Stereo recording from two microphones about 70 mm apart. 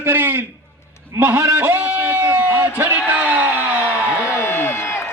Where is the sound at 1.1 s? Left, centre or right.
Right.